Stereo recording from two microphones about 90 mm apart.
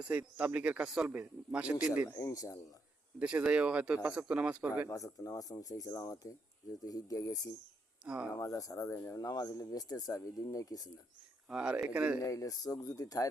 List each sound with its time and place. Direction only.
0.0 s speech: 15° right (ahead or behind)
2.0 s speech: 30° left (ahead or behind)
3.2 s speech: 15° right (ahead or behind)
4.9 s speech: 35° left (ahead or behind)
8.0 s speech: 10° right (ahead or behind)
8.3 s speech: 40° left (ahead or behind)
11.4 s speech: 10° right (ahead or behind)
12.2 s speech: 40° left (ahead or behind)